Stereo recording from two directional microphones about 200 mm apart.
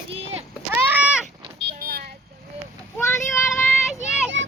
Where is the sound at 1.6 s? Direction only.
50° right (ahead or behind).